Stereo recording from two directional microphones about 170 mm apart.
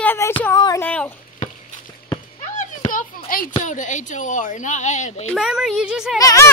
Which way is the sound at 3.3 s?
55° left (ahead or behind).